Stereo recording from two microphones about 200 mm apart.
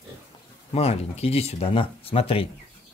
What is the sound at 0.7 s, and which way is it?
Speech, 30° left (ahead or behind).